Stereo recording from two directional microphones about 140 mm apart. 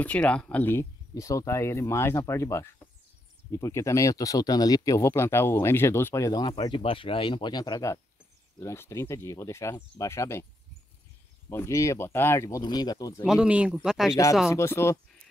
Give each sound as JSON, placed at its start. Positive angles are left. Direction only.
{"t": 0.0, "sound": "speech", "side_deg": 10}
{"t": 11.4, "sound": "speech", "side_deg": 20}
{"t": 13.3, "sound": "speech", "side_deg": -5}
{"t": 14.5, "sound": "speech", "side_deg": 20}